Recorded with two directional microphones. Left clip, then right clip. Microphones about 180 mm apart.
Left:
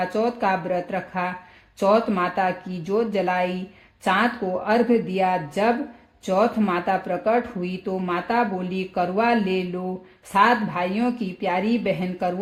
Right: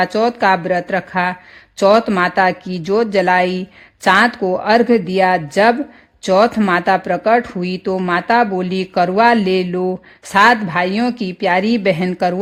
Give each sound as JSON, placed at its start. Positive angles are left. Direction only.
{"t": 0.0, "sound": "speech", "side_deg": -35}